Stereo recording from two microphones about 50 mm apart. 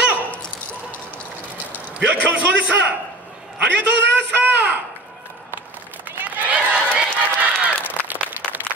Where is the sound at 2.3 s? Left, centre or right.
Right.